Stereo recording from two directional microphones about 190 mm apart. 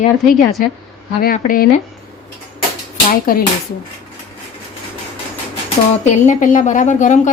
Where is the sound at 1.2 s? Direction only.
50° left (ahead or behind).